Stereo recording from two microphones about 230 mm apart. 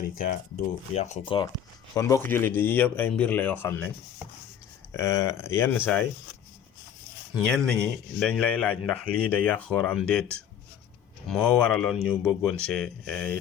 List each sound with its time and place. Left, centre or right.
0.9 s a man's voice: left; by 3.8 s centre
4.9 s a man's voice: centre
7.3 s speech: centre